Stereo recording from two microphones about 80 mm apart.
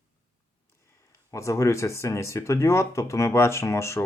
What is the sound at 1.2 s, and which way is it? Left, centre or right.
Speech, left.